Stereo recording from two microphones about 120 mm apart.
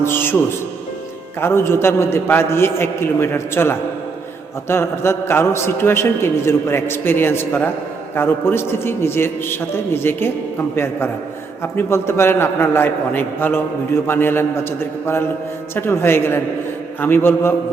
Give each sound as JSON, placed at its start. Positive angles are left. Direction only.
{"t": 0.0, "sound": "a man's voice", "side_deg": 20}
{"t": 1.4, "sound": "a man's voice", "side_deg": 20}
{"t": 11.6, "sound": "a man's voice", "side_deg": 20}